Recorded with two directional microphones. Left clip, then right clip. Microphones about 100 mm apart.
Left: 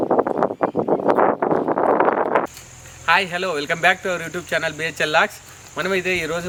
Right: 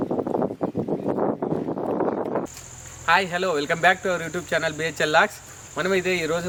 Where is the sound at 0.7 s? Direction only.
85° left.